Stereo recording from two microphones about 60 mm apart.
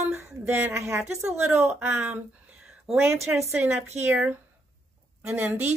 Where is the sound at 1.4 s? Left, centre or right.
Right.